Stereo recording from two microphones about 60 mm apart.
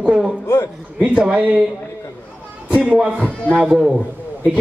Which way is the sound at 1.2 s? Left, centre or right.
Right.